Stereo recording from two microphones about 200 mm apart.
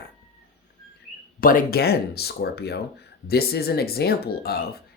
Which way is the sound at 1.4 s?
45° left (ahead or behind).